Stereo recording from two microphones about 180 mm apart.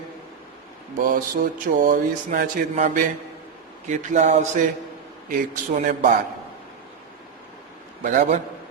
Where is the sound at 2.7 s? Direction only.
40° right (ahead or behind).